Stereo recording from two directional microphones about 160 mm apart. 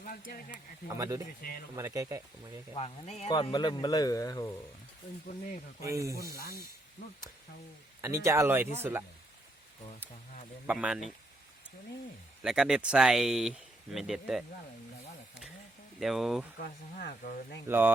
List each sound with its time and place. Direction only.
0.0 s speech: 60° left (ahead or behind)
0.9 s speech: 20° right (ahead or behind)
1.4 s speech: 65° left (ahead or behind)
1.7 s speech: 20° right (ahead or behind)
2.7 s speech: 40° left (ahead or behind)
3.5 s speech: 30° left (ahead or behind)
5.8 s speech: 20° right (ahead or behind)
6.1 s speech: 75° left (ahead or behind)
8.0 s speech: 20° right (ahead or behind)
10.7 s speech: 5° right (ahead or behind)
12.4 s speech: 5° right (ahead or behind)
16.0 s speech: centre (ahead or behind)
16.6 s speech: 80° left
17.7 s speech: 15° right (ahead or behind)